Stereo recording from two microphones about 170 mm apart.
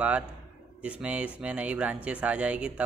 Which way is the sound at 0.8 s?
5° right (ahead or behind).